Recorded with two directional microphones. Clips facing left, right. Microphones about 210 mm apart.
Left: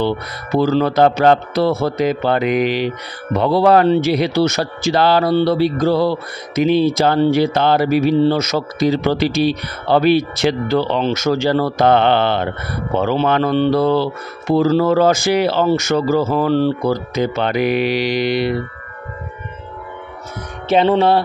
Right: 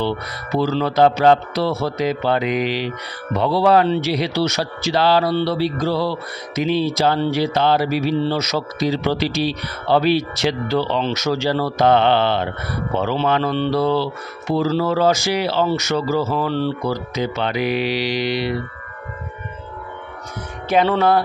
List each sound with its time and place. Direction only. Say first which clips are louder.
0.6 s speech: left 3 dB; 50° left (ahead or behind)
20.6 s music: left 3 dB; 25° left (ahead or behind)